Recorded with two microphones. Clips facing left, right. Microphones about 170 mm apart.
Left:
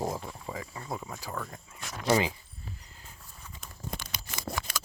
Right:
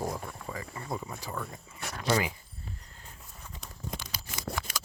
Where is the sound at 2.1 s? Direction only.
25° left (ahead or behind).